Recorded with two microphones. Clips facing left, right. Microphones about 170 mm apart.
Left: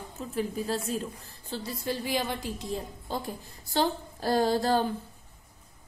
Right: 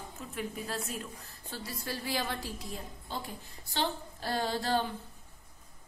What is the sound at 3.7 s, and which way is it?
A woman's voice, 40° left (ahead or behind).